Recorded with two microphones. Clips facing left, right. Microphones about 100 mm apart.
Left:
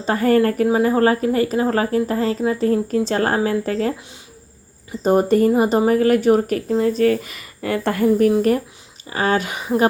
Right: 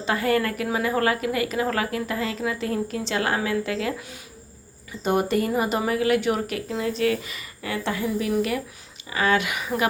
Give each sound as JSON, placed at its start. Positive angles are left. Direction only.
{"t": 0.0, "sound": "speech", "side_deg": 40}